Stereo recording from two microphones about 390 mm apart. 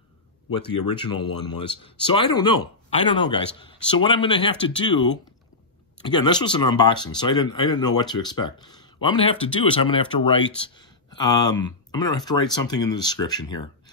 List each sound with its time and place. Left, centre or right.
1.0 s speech: left
1.8 s speech: centre